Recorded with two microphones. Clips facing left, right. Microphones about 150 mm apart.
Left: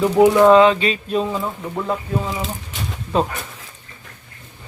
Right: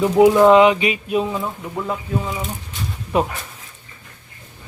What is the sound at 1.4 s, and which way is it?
Speech, centre (ahead or behind).